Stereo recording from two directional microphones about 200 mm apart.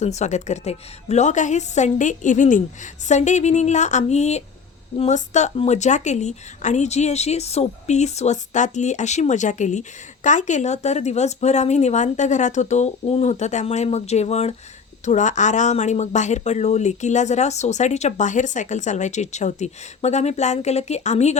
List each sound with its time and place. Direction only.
0.0 s speech: 35° left (ahead or behind)